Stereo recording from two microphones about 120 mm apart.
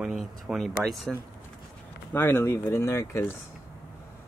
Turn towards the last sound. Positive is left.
turn(degrees=25)  # may be behind; listen again after turning